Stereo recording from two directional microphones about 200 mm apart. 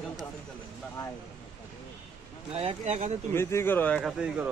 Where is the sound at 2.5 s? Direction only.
30° right (ahead or behind).